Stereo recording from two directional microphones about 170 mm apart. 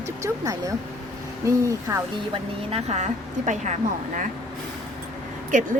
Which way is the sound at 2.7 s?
40° right (ahead or behind).